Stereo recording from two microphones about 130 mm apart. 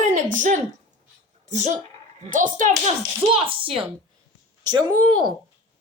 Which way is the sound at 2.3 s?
85° right.